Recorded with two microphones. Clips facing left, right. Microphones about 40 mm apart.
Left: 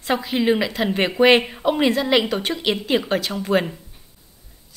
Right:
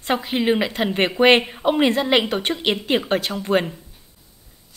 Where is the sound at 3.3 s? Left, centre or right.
Centre.